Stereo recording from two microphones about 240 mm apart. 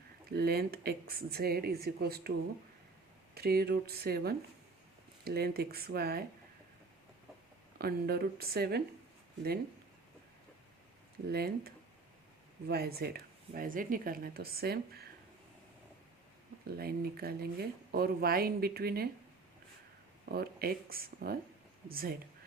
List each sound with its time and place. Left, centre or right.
0.3 s speech: right
3.3 s speech: right
7.8 s speech: right
11.3 s speech: right
16.6 s speech: right
20.2 s speech: right